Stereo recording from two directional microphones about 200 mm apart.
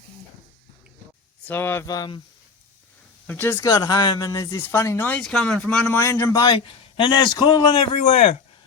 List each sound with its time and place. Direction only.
1.5 s speech: 10° left (ahead or behind)
3.2 s speech: 10° left (ahead or behind); by 8.4 s 30° left (ahead or behind)